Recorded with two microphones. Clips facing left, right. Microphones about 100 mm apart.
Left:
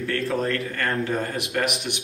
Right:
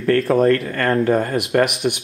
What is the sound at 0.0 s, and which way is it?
Speech, 45° right (ahead or behind).